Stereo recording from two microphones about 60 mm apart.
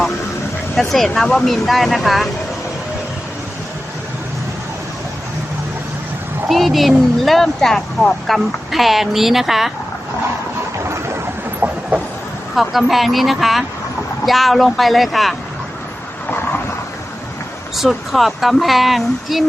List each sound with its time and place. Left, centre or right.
0.8 s speech: centre
6.5 s speech: centre
11.6 s chicken: right
12.5 s speech: centre
17.7 s speech: centre